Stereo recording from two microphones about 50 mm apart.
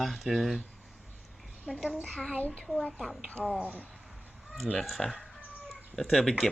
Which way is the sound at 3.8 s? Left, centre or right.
Centre.